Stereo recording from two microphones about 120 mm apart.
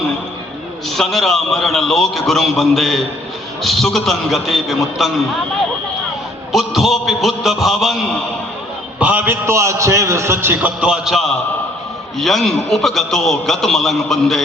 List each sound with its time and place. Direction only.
0.9 s a man's voice: 5° left (ahead or behind)
6.5 s a man's voice: centre (ahead or behind)
9.0 s a man's voice: 15° right (ahead or behind); by 14.4 s centre (ahead or behind)